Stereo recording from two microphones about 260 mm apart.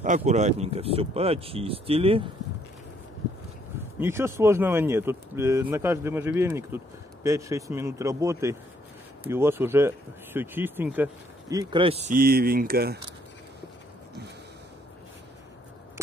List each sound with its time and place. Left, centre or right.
0.0 s speech: right
4.0 s speech: centre
12.1 s speech: right